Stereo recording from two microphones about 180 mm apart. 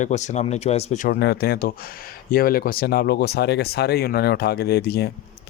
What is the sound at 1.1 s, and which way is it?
Speech, 60° left (ahead or behind).